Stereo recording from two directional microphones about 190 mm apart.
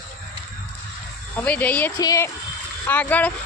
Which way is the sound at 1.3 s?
10° left (ahead or behind).